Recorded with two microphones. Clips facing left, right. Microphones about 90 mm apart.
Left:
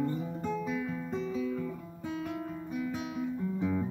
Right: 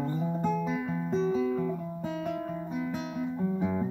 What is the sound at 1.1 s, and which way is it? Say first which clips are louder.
Music: right 10 dB; 25° right (ahead or behind).